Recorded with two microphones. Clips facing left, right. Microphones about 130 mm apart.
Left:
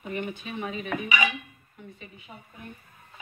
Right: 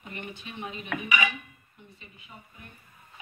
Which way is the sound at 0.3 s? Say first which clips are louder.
Left 5 dB; 45° left (ahead or behind).